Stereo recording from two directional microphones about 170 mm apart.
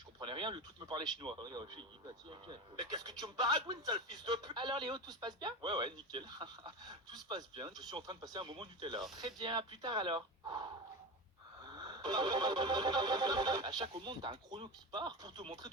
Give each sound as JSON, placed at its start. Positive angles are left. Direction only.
{"t": 0.2, "sound": "speech", "side_deg": -30}